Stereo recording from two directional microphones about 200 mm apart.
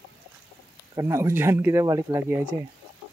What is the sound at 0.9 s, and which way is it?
Speech, 15° right (ahead or behind).